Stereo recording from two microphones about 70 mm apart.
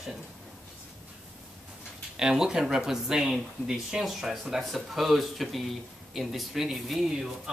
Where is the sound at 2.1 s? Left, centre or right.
Centre.